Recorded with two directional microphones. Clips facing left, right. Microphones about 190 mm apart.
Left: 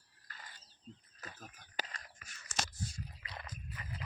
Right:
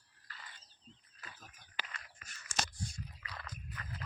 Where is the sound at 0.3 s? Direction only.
45° left (ahead or behind).